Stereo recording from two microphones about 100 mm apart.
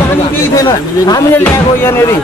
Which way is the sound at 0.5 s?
35° left (ahead or behind).